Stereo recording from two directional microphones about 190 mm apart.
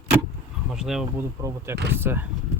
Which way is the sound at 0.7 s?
5° right (ahead or behind).